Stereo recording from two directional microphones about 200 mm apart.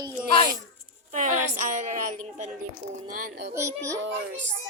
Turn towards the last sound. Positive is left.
turn(degrees=-65)  # may be behind; listen again after turning